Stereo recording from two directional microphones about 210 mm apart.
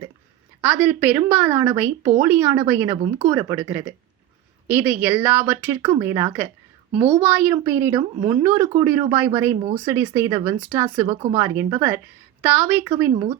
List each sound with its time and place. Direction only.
0.6 s a woman's voice: 5° right (ahead or behind)
11.0 s speech: 35° right (ahead or behind)
11.3 s a woman's voice: 15° right (ahead or behind)
12.8 s a woman's voice: 20° right (ahead or behind)